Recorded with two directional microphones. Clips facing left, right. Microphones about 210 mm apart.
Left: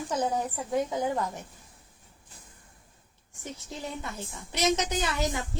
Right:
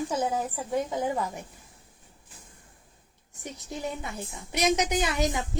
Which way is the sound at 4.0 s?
15° right (ahead or behind).